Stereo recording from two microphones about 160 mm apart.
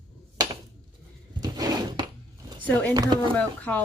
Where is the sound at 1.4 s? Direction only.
25° right (ahead or behind).